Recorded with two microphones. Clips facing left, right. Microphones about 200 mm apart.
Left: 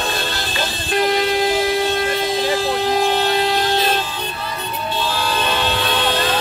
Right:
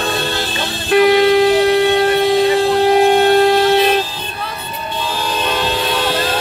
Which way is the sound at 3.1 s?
50° right (ahead or behind).